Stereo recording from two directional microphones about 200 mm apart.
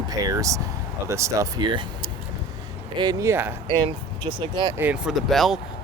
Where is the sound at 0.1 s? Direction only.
15° right (ahead or behind).